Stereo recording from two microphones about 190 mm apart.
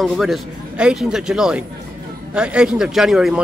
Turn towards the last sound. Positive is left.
turn(degrees=0)  # may be behind; listen again after turning